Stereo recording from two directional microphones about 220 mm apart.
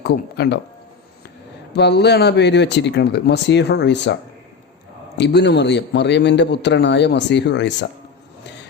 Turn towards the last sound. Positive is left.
turn(degrees=50)  # may be behind; listen again after turning